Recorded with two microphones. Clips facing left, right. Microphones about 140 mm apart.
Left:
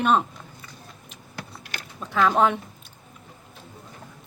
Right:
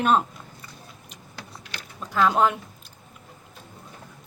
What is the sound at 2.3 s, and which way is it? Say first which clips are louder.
Speech: left 1 dB; 5° right (ahead or behind).